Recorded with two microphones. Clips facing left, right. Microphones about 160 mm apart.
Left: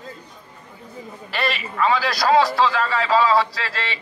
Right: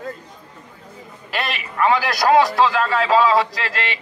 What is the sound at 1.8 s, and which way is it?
Speech, 20° right (ahead or behind).